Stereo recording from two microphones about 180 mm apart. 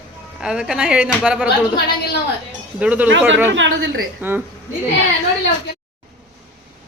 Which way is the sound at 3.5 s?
90° right.